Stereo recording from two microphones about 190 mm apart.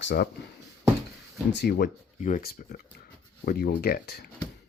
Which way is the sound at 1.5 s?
55° left (ahead or behind).